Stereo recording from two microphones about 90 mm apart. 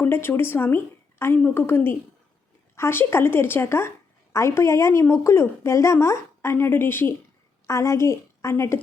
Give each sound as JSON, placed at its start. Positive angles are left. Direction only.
{"t": 0.0, "sound": "a woman's voice", "side_deg": 25}